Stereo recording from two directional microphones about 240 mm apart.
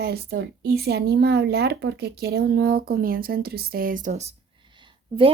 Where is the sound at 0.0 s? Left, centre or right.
Right.